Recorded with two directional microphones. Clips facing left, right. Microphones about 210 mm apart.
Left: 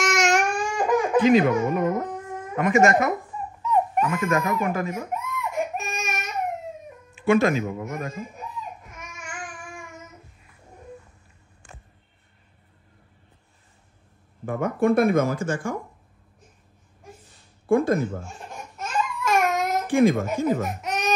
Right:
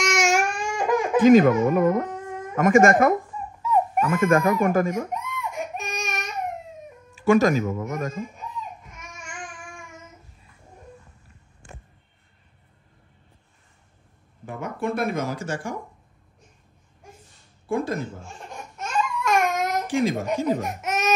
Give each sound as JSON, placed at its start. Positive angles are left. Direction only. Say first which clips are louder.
{"t": 0.0, "sound": "baby cry", "louder": "even", "side_deg": 0}
{"t": 1.2, "sound": "speech", "louder": "right 7 dB", "side_deg": -45}
{"t": 5.1, "sound": "baby cry", "louder": "left 3 dB", "side_deg": 0}
{"t": 7.2, "sound": "speech", "louder": "right 1 dB", "side_deg": -40}
{"t": 14.4, "sound": "speech", "louder": "left 6 dB", "side_deg": 55}
{"t": 17.6, "sound": "speech", "louder": "left 6 dB", "side_deg": 55}
{"t": 18.8, "sound": "baby cry", "louder": "right 1 dB", "side_deg": 0}
{"t": 19.9, "sound": "speech", "louder": "left 6 dB", "side_deg": 55}
{"t": 20.6, "sound": "baby cry", "louder": "right 1 dB", "side_deg": 0}